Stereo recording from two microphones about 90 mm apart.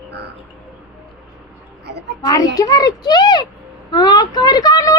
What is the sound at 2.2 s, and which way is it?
A child's voice, 45° left (ahead or behind).